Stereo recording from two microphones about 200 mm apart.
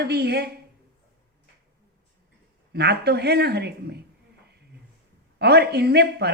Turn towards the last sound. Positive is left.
turn(degrees=-55)  # may be behind; listen again after turning